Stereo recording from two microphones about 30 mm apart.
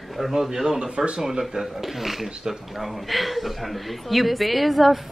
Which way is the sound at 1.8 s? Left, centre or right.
Centre.